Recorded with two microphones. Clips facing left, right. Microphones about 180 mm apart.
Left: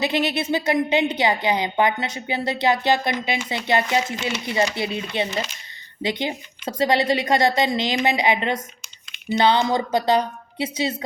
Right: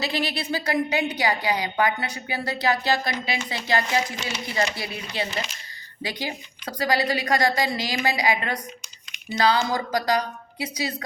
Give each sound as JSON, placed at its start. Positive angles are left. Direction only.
{"t": 0.0, "sound": "a woman's voice", "side_deg": 20}